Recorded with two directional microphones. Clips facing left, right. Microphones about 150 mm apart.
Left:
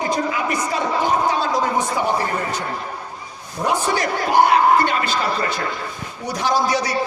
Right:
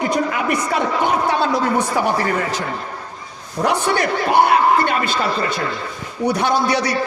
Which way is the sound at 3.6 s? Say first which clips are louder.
Right 2 dB; 55° right (ahead or behind).